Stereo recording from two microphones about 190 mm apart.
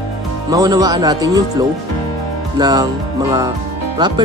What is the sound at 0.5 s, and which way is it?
Speech, 20° right (ahead or behind).